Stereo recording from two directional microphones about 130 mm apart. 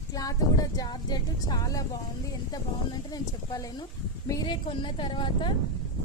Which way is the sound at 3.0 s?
30° left (ahead or behind).